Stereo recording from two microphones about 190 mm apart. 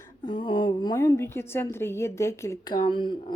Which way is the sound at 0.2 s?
25° left (ahead or behind).